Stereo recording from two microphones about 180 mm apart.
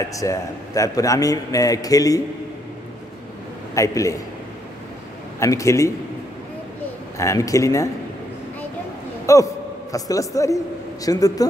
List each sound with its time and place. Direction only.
0.1 s a man's voice: 20° left (ahead or behind)
3.7 s speech: 15° left (ahead or behind)
5.4 s speech: 15° left (ahead or behind)
7.2 s speech: 15° left (ahead or behind)
9.2 s a man's voice: 15° left (ahead or behind)